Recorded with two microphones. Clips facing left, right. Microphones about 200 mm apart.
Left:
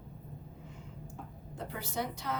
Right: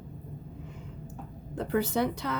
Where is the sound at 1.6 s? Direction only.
65° right (ahead or behind).